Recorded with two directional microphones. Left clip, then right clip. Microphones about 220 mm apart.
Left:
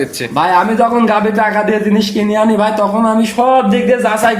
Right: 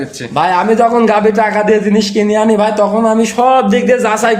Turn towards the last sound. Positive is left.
turn(degrees=-30)  # may be behind; listen again after turning